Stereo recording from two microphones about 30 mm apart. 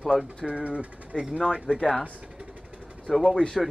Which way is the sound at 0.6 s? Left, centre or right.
Right.